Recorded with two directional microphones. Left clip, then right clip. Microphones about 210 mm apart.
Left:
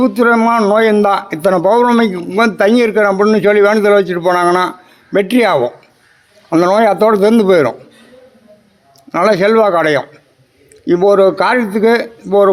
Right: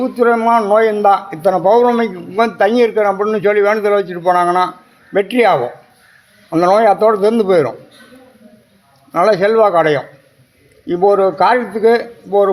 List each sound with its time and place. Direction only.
0.0 s a man's voice: 55° left (ahead or behind)
9.1 s a man's voice: 55° left (ahead or behind)